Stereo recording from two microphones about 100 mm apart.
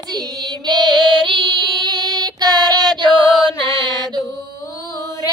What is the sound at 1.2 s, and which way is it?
Child singing, 50° right (ahead or behind).